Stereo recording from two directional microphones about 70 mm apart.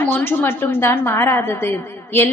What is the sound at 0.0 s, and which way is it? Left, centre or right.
A woman's voice, left.